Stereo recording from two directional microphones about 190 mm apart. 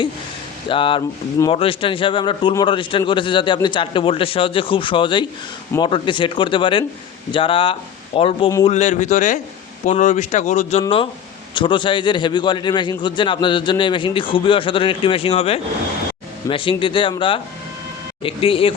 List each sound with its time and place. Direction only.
0.7 s speech: 25° left (ahead or behind)